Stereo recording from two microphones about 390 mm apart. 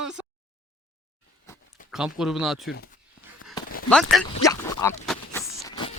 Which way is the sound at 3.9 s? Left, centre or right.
Centre.